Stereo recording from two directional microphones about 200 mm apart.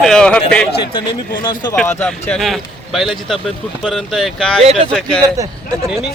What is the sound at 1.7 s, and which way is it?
Speech, 5° left (ahead or behind).